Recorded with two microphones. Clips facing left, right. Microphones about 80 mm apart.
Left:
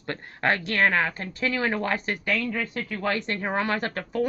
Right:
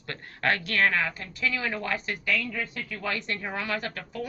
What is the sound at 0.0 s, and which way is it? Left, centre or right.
Speech, left.